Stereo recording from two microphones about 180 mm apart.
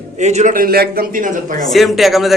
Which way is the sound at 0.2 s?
40° right (ahead or behind).